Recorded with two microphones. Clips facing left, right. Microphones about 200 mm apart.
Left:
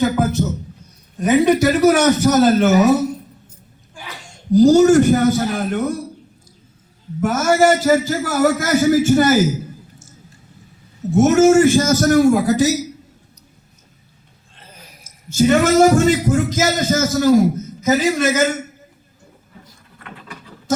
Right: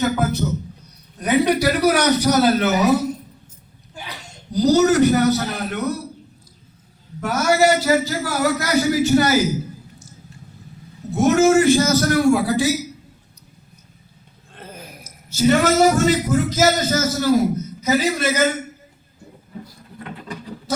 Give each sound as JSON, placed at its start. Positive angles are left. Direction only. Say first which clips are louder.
{"t": 1.2, "sound": "a man's voice", "louder": "left 4 dB", "side_deg": 50}
{"t": 4.5, "sound": "a man's voice", "louder": "left 5 dB", "side_deg": 50}
{"t": 7.2, "sound": "a man's voice", "louder": "left 3 dB", "side_deg": 50}
{"t": 11.1, "sound": "a man's voice", "louder": "left 3 dB", "side_deg": 50}
{"t": 14.5, "sound": "a sound", "louder": "right 8 dB", "side_deg": -55}
{"t": 15.3, "sound": "a man's voice", "louder": "left 3 dB", "side_deg": 50}